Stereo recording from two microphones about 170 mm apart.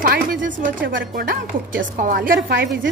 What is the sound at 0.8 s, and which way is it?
Speech, 60° right (ahead or behind).